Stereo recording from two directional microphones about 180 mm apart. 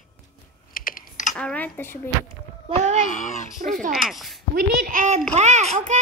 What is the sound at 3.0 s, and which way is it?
Speech, 45° left (ahead or behind).